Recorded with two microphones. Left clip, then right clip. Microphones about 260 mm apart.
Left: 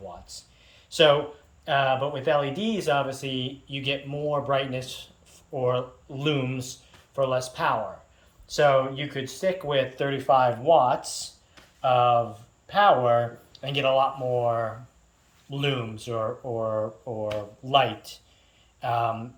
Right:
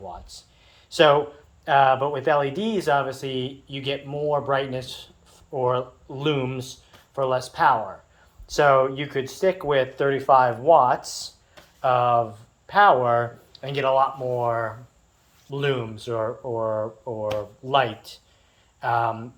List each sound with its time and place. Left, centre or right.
0.1 s a sound: centre
1.6 s speech: centre
15.4 s speech: centre